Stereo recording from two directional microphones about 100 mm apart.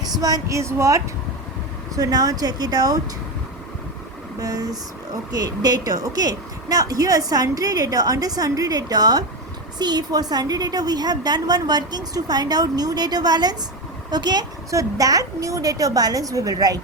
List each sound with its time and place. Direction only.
0.1 s a woman's voice: 40° right (ahead or behind)
4.4 s a woman's voice: 40° right (ahead or behind)